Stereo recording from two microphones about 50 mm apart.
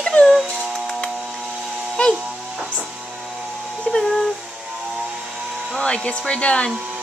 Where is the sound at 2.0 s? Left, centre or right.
Left.